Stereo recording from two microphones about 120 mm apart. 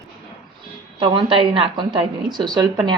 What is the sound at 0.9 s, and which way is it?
A woman's voice, 45° right (ahead or behind).